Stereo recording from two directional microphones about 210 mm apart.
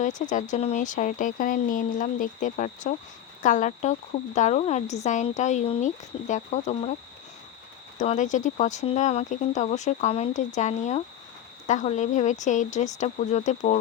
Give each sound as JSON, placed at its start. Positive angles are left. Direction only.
{"t": 0.0, "sound": "speech", "side_deg": 35}
{"t": 7.9, "sound": "speech", "side_deg": 35}